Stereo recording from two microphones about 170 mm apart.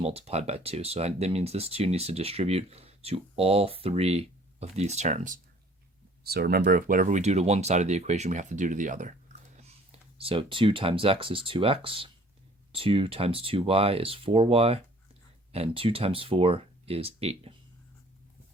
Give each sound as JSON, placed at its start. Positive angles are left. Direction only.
{"t": 0.0, "sound": "speech", "side_deg": -35}
{"t": 6.2, "sound": "speech", "side_deg": -65}